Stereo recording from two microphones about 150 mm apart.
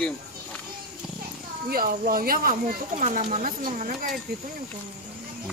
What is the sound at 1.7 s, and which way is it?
Speech, 75° right (ahead or behind).